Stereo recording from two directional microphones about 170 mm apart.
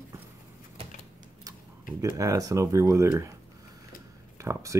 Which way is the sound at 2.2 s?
20° right (ahead or behind).